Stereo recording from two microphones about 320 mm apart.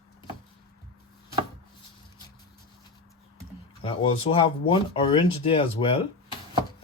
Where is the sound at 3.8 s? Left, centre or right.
Centre.